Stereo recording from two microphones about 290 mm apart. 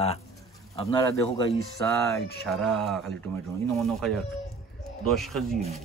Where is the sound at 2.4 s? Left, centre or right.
Centre.